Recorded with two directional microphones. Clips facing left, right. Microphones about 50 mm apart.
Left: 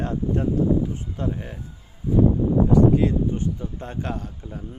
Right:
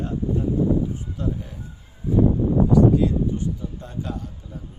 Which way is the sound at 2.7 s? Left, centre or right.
Left.